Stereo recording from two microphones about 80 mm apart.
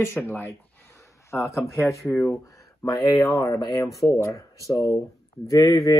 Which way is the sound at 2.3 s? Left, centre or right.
Left.